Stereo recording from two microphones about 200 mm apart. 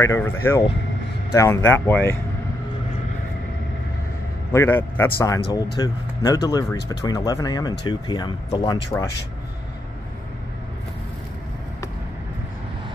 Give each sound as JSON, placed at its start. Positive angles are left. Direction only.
{"t": 0.0, "sound": "speech", "side_deg": 15}
{"t": 4.5, "sound": "speech", "side_deg": 10}